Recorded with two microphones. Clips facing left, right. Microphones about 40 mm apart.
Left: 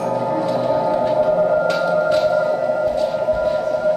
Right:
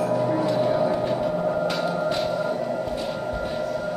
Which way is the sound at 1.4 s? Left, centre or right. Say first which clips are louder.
Left 7 dB; left.